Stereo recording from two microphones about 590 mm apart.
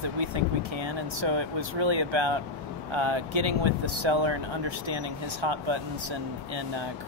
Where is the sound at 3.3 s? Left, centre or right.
Right.